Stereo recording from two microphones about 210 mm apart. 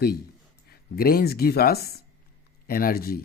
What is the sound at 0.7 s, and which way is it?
Speech, 45° left (ahead or behind).